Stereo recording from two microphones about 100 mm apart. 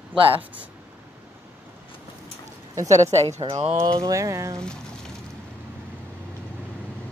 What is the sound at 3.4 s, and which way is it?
Speech, 60° right (ahead or behind).